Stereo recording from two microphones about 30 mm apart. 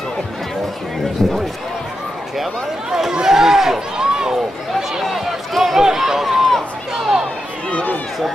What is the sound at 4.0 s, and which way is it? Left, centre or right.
Run, right.